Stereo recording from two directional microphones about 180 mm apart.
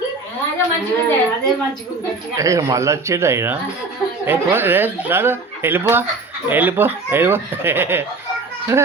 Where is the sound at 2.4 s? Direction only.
15° right (ahead or behind).